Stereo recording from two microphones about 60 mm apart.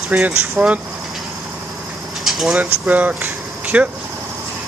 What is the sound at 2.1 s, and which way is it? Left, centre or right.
Vehicle, centre.